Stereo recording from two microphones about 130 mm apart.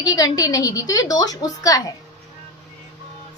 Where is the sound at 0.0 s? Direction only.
30° left (ahead or behind).